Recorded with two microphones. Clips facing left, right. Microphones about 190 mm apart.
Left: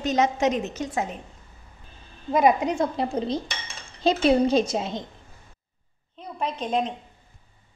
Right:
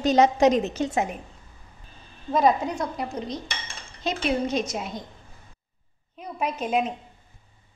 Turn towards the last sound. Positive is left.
turn(degrees=-5)  # may be behind; listen again after turning